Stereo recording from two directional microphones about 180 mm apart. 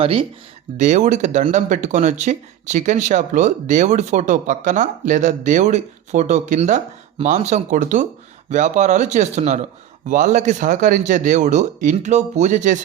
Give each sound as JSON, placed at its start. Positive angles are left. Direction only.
{"t": 0.0, "sound": "speech", "side_deg": -30}